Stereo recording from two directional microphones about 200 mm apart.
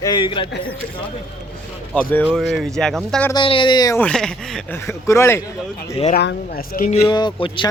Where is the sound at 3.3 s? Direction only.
25° left (ahead or behind); by 4.8 s 5° left (ahead or behind).